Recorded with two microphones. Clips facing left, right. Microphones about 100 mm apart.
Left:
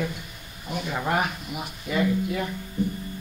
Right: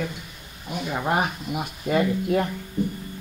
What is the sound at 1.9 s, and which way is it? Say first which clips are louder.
Speech: right 3 dB; 50° right (ahead or behind).